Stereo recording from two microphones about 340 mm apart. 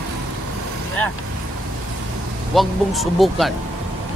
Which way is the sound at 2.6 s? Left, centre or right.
Centre.